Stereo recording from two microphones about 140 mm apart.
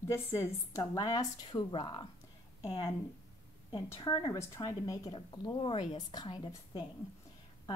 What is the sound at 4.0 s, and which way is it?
A woman's voice, 25° left (ahead or behind).